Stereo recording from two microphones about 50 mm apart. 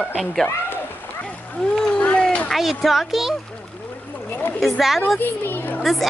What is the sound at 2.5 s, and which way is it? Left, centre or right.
Speech, centre.